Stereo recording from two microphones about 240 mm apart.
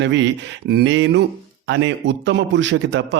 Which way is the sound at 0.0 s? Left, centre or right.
Right.